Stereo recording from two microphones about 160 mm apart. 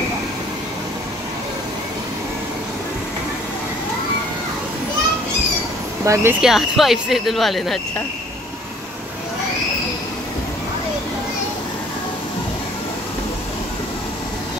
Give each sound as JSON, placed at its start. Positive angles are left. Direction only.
{"t": 6.0, "sound": "speech", "side_deg": -20}
{"t": 6.4, "sound": "speech", "side_deg": 0}